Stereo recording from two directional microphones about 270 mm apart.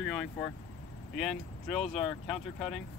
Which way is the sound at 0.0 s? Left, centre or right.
Centre.